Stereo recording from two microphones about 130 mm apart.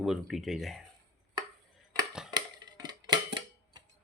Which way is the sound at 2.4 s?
35° right (ahead or behind).